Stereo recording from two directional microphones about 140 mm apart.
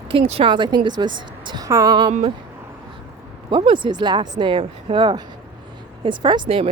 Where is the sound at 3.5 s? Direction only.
35° right (ahead or behind).